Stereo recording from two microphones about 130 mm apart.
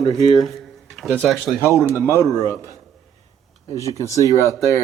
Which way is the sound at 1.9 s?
20° right (ahead or behind).